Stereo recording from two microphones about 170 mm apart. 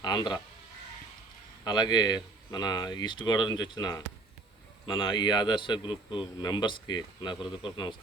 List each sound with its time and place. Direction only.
0.0 s speech: 25° left (ahead or behind)
1.6 s speech: 25° left (ahead or behind)